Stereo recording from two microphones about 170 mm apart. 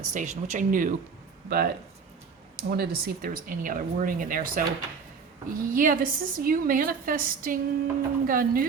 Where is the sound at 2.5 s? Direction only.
65° right (ahead or behind).